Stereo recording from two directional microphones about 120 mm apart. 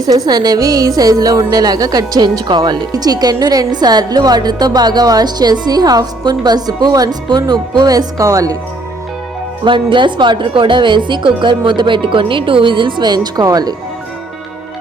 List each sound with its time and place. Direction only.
0.0 s a woman's voice: 30° right (ahead or behind)
9.6 s a woman's voice: 40° right (ahead or behind)